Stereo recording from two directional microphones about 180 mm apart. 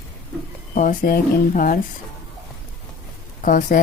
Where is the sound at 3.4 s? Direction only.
45° left (ahead or behind).